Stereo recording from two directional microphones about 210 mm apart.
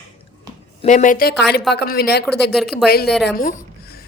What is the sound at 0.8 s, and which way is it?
Speech, 35° left (ahead or behind).